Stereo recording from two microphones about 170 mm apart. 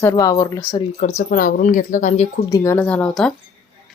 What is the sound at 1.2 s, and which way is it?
A woman's voice, 55° left (ahead or behind).